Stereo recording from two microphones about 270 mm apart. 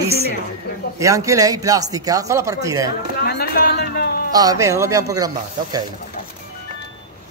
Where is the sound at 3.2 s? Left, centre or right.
Left.